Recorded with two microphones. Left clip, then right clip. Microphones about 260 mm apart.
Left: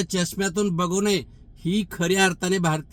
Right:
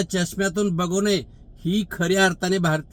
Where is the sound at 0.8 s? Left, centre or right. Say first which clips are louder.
Even; right.